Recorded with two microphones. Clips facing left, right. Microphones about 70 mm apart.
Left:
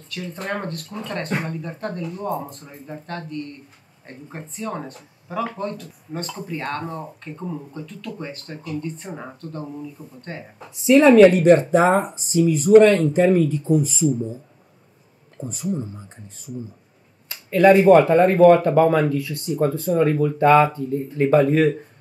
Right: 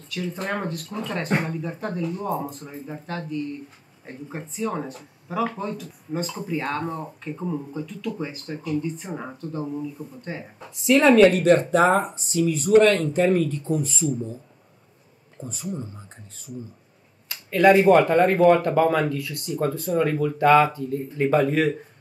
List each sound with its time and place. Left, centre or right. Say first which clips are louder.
0.1 s speech: even; centre
15.4 s speech: left 5 dB; centre
17.6 s speech: left 3 dB; centre
19.0 s speech: left 4 dB; left
19.9 s speech: left 3 dB; centre
21.2 s speech: left 4 dB; centre